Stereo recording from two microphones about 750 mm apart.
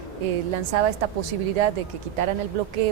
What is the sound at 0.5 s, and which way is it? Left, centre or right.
A woman's voice, right.